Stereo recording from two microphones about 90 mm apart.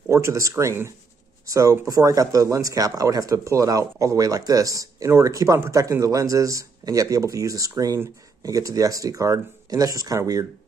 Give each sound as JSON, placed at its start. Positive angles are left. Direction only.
{"t": 0.1, "sound": "speech", "side_deg": -35}